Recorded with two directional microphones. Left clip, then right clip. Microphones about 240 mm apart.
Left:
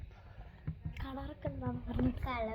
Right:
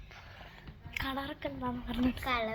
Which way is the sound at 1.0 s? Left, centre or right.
Right.